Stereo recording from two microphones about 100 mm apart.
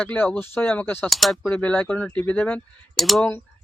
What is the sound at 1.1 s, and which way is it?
Speech, centre (ahead or behind).